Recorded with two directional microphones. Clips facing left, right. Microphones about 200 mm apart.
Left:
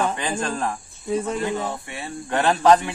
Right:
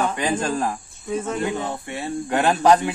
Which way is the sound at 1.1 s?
35° left (ahead or behind).